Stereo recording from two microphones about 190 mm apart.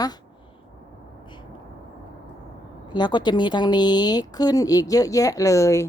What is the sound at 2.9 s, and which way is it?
A woman's voice, 25° left (ahead or behind).